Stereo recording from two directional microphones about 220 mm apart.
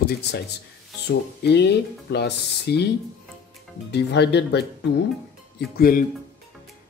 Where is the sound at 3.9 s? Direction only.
50° left (ahead or behind).